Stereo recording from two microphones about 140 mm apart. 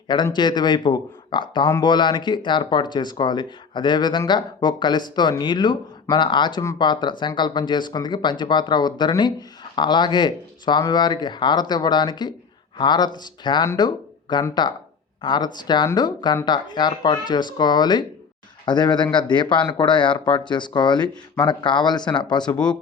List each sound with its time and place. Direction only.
0.3 s a man's voice: 30° left (ahead or behind)
22.5 s speech: 5° left (ahead or behind)